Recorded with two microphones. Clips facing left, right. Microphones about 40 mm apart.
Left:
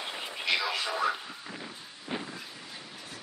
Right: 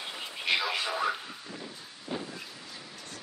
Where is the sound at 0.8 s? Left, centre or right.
Centre.